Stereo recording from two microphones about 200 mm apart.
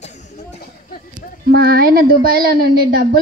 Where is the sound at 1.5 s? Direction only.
50° right (ahead or behind).